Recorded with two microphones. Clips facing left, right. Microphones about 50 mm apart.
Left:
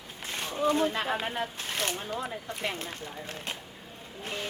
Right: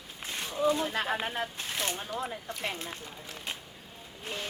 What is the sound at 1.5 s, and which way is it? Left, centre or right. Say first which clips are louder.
Speech: left 2 dB; left.